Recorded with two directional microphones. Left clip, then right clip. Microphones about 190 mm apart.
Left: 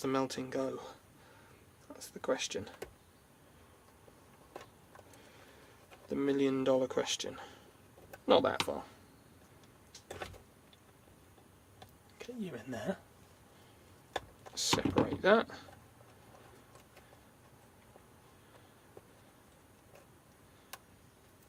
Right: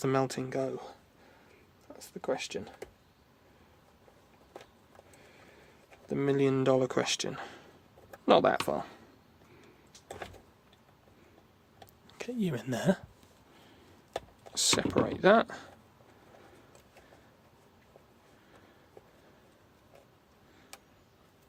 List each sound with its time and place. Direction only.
0.0 s speech: 40° right (ahead or behind)
0.4 s speech: 30° right (ahead or behind)
2.0 s speech: 20° right (ahead or behind)
6.1 s speech: 35° right (ahead or behind)
12.1 s speech: 55° right (ahead or behind)
14.5 s speech: 55° right (ahead or behind)